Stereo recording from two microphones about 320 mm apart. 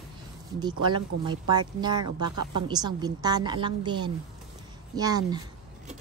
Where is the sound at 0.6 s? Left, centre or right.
Centre.